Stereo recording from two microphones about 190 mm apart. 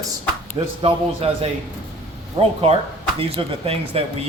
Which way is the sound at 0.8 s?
30° right (ahead or behind).